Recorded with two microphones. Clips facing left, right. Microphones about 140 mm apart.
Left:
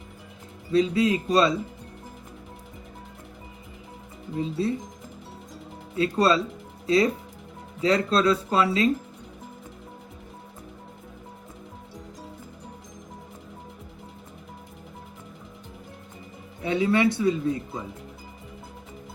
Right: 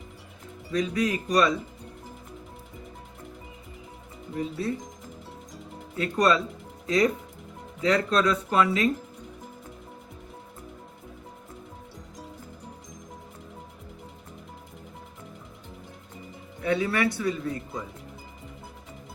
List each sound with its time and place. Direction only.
0.7 s speech: 30° left (ahead or behind)
4.4 s speech: 25° left (ahead or behind)
6.0 s speech: 30° left (ahead or behind)
16.6 s speech: 20° left (ahead or behind)